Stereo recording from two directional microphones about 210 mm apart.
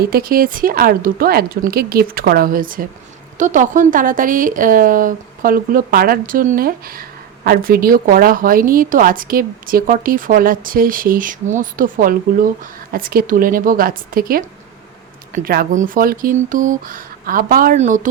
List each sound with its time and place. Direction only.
0.0 s a woman's voice: 45° right (ahead or behind)